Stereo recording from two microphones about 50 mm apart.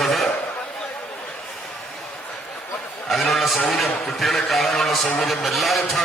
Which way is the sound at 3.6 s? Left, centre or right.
Centre.